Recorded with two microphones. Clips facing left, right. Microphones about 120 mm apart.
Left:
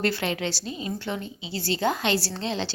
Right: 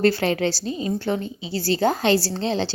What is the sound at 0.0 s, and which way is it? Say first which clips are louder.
A woman's voice: right 7 dB; 35° right (ahead or behind).